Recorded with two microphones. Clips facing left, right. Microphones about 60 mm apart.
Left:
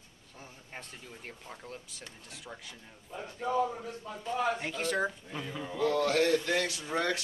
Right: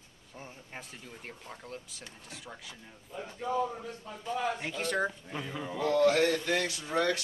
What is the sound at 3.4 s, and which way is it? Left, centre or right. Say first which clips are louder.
Speech: left 1 dB; left.